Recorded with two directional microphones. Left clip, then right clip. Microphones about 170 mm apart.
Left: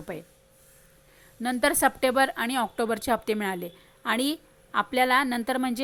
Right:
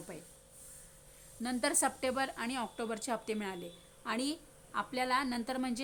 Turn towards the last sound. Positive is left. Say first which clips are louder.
# left 10 dB
turn(degrees=25)  # may be behind; listen again after turning